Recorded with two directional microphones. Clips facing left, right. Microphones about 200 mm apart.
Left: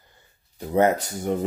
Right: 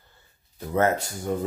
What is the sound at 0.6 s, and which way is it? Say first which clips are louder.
Speech: left 3 dB; 15° left (ahead or behind).